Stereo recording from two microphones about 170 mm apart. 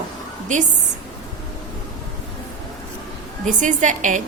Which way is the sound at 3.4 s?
50° right (ahead or behind).